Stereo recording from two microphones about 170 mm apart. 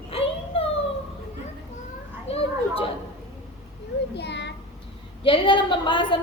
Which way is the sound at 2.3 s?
35° left (ahead or behind).